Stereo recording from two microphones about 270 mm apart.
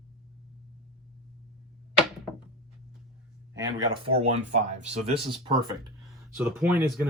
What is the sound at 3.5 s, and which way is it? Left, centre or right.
Speech, centre.